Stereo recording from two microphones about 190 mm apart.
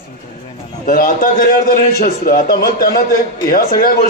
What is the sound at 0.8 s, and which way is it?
A man's voice, 50° left (ahead or behind).